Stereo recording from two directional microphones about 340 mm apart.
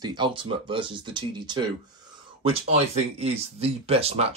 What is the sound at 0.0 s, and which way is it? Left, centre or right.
Speech, centre.